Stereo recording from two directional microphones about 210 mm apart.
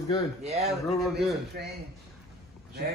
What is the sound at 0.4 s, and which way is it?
Speech, 30° right (ahead or behind).